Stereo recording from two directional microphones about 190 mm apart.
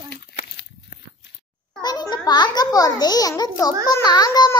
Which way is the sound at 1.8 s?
20° left (ahead or behind).